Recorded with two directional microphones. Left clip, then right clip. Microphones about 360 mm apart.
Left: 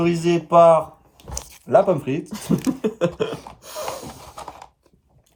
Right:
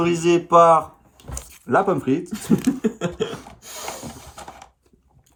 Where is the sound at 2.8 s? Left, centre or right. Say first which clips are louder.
Left 3 dB; centre.